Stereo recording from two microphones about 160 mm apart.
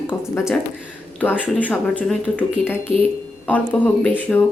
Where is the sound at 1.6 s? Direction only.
10° left (ahead or behind).